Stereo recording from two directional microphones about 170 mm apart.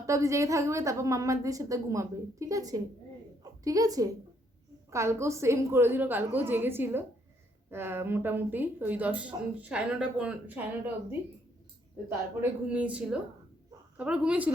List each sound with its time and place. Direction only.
0.0 s a woman's voice: 20° right (ahead or behind)
12.0 s speech: 10° right (ahead or behind)